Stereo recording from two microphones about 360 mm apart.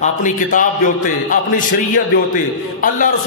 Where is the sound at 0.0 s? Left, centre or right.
Left.